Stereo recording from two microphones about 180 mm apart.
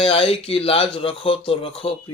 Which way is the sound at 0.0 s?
30° left (ahead or behind).